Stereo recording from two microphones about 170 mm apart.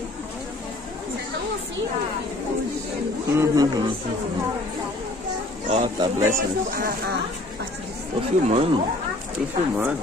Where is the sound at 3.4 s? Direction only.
20° right (ahead or behind).